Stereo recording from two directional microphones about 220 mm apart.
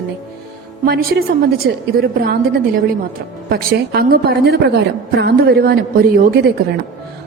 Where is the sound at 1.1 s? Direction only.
50° right (ahead or behind).